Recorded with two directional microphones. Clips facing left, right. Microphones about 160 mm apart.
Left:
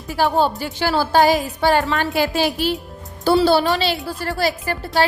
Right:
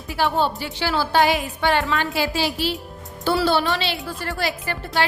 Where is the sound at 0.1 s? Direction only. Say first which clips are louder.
Left 3 dB; 40° left (ahead or behind).